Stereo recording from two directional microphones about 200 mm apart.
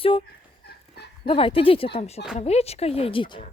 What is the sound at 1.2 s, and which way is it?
Speech, 25° left (ahead or behind).